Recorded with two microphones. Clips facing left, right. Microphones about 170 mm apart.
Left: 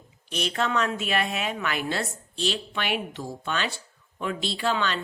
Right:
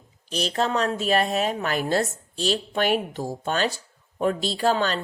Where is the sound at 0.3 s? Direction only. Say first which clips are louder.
Right 3 dB; 35° right (ahead or behind).